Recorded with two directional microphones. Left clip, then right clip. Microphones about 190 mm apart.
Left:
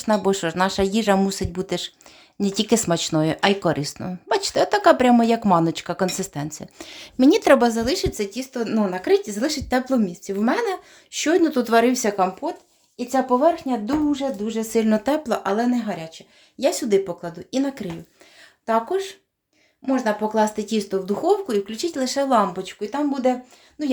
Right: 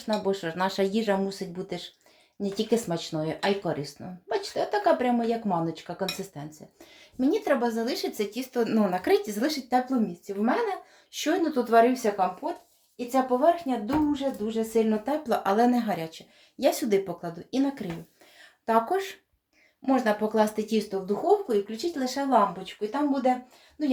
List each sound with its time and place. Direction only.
0.0 s speech: 30° left (ahead or behind)
7.2 s speech: 50° left (ahead or behind); by 9.5 s 20° left (ahead or behind)
9.5 s speech: 40° left (ahead or behind)
10.2 s speech: 70° left (ahead or behind)
11.1 s speech: 40° left (ahead or behind); by 15.2 s 60° left (ahead or behind)
15.4 s speech: 15° left (ahead or behind)
18.6 s speech: 15° left (ahead or behind)
21.4 s speech: 50° left (ahead or behind); by 23.9 s 70° left (ahead or behind)